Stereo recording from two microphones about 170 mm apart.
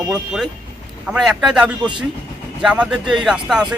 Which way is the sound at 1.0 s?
5° right (ahead or behind).